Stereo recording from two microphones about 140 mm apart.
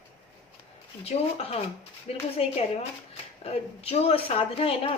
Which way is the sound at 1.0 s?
45° left (ahead or behind).